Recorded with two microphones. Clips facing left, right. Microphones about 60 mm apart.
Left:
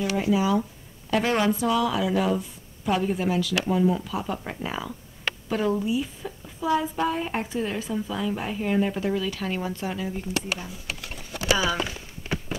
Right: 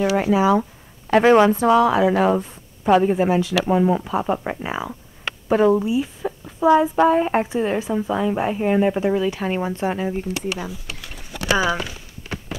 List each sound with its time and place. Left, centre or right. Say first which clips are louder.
0.3 s a woman's voice: right 6 dB; right
11.5 s speech: right 5 dB; right